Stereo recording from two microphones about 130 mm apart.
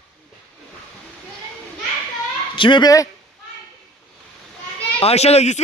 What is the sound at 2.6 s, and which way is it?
Speech, 40° left (ahead or behind).